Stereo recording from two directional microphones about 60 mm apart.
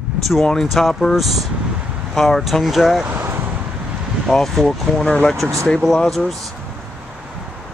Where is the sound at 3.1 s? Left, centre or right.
Right.